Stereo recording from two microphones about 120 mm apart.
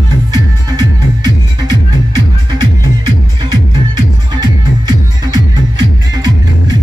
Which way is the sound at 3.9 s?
35° right (ahead or behind).